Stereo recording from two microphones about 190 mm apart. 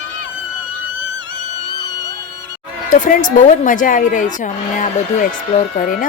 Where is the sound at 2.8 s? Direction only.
40° left (ahead or behind).